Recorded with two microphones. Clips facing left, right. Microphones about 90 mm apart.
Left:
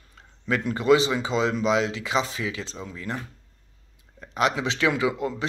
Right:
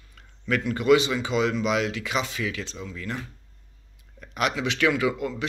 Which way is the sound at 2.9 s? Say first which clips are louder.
Left 2 dB; 25° left (ahead or behind).